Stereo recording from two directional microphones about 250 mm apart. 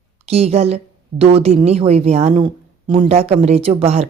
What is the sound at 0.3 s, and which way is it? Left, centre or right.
Speech, right.